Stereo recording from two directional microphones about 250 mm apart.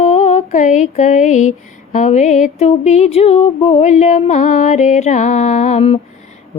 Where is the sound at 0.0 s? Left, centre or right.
Left.